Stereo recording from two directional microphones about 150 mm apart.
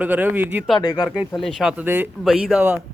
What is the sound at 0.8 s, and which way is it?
Speech, 25° left (ahead or behind).